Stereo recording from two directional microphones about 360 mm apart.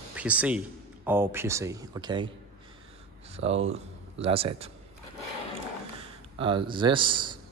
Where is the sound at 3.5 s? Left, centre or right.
Right.